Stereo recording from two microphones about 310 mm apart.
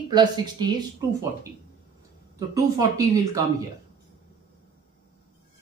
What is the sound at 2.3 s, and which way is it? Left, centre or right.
Speech, centre.